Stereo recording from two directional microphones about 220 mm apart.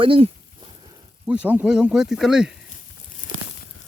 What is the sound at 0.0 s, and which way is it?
Speech, 25° right (ahead or behind).